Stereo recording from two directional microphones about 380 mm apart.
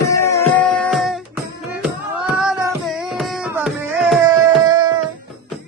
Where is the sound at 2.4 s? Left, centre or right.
Centre.